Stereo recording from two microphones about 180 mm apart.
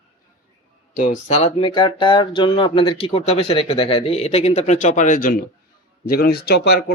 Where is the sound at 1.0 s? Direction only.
40° left (ahead or behind).